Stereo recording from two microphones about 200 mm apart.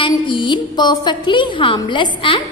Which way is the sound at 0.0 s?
25° left (ahead or behind).